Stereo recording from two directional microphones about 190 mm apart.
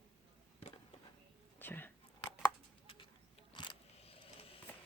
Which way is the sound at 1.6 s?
10° left (ahead or behind).